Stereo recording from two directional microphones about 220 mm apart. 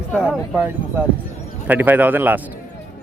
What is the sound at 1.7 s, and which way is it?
Speech, 10° right (ahead or behind).